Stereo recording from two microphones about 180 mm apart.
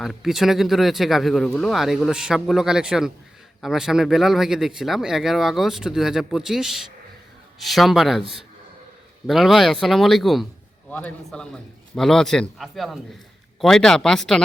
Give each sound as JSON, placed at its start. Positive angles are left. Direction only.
{"t": 0.0, "sound": "speech", "side_deg": 0}
{"t": 8.2, "sound": "a man's voice", "side_deg": -30}
{"t": 9.2, "sound": "speech", "side_deg": 0}